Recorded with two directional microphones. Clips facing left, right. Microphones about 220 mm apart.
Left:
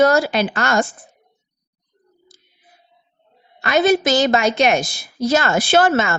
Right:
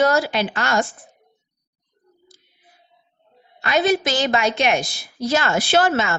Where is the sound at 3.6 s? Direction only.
45° left (ahead or behind).